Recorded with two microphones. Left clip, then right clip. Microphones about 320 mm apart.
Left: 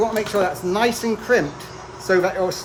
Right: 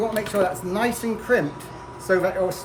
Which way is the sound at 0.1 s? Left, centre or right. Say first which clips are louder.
Left 2 dB; centre.